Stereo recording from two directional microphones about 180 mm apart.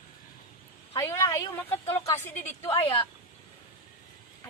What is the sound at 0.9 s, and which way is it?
Speech, 15° left (ahead or behind).